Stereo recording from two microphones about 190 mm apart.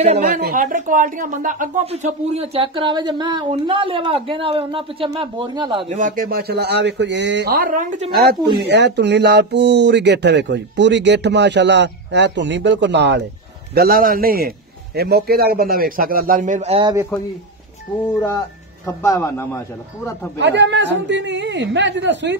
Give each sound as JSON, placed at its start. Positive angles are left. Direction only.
{"t": 0.4, "sound": "speech", "side_deg": -50}
{"t": 5.9, "sound": "speech", "side_deg": -45}
{"t": 8.5, "sound": "speech", "side_deg": -65}
{"t": 13.7, "sound": "a man's voice", "side_deg": -50}
{"t": 17.1, "sound": "a man's voice", "side_deg": 5}
{"t": 18.9, "sound": "speech", "side_deg": 15}
{"t": 20.3, "sound": "a man's voice", "side_deg": -65}